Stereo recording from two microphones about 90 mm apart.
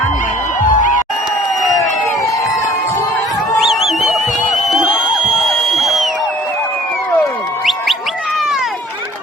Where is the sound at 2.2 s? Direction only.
40° left (ahead or behind).